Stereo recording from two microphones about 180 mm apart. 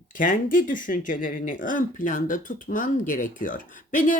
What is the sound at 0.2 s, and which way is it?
Speech, 50° left (ahead or behind).